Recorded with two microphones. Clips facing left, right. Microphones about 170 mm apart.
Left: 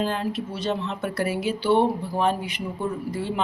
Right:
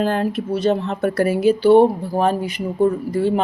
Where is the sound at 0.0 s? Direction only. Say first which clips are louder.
Right 6 dB; 50° right (ahead or behind).